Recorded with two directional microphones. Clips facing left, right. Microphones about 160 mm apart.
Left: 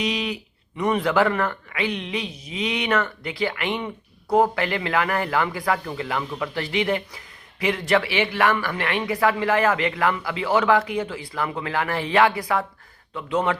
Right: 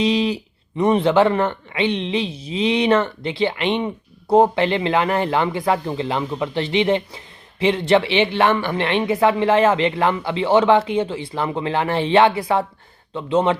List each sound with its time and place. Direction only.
0.0 s speech: 30° right (ahead or behind)